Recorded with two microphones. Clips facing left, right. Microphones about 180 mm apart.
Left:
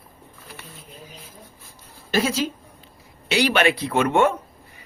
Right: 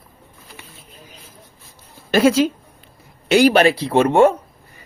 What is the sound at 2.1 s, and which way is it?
Speech, 60° right (ahead or behind).